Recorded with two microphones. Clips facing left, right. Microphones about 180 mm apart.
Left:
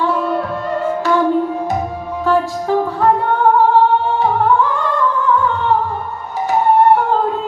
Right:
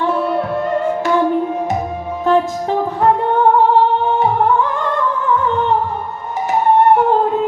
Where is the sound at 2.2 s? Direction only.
20° right (ahead or behind).